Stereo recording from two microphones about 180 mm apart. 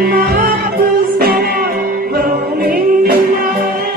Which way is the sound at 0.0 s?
55° right (ahead or behind).